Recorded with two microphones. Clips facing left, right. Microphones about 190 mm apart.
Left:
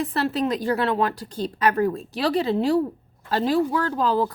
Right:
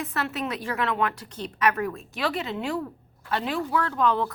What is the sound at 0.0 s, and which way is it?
A woman's voice, 35° left (ahead or behind).